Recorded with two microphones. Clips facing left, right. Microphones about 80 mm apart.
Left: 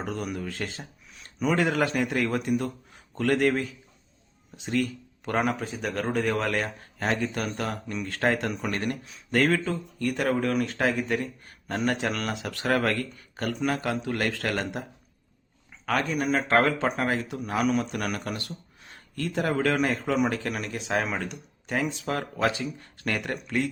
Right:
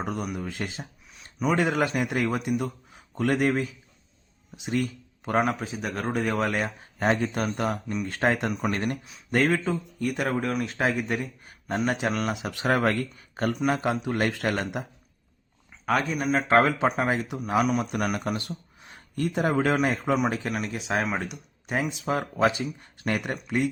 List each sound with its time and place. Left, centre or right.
0.0 s speech: centre
1.1 s speech: centre
1.5 s speech: right
5.4 s speech: centre
7.3 s speech: right
7.9 s speech: centre
8.1 s speech: right
9.5 s speech: centre
11.1 s speech: centre
11.9 s speech: centre
12.3 s speech: centre
15.9 s speech: centre
17.9 s speech: centre
20.1 s speech: centre